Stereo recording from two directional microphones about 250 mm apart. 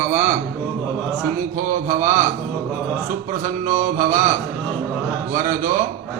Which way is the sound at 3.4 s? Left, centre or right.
Right.